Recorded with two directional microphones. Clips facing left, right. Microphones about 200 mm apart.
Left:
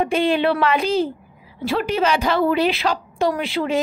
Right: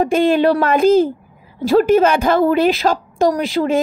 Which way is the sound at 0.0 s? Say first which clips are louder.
Right 5 dB; 45° right (ahead or behind).